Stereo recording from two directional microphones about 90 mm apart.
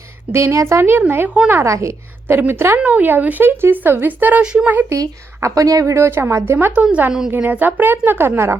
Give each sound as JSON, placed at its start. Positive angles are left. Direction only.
{"t": 0.3, "sound": "speech", "side_deg": -30}
{"t": 1.6, "sound": "a woman's voice", "side_deg": -35}
{"t": 4.9, "sound": "a woman's voice", "side_deg": -35}